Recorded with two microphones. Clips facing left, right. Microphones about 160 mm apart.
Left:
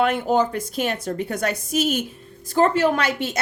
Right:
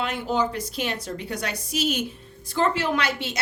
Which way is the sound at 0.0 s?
55° left (ahead or behind).